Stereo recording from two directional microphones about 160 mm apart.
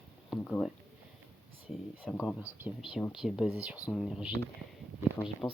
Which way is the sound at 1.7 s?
Centre (ahead or behind).